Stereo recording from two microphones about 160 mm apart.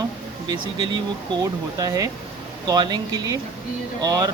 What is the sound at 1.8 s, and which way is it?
Speech, 20° right (ahead or behind).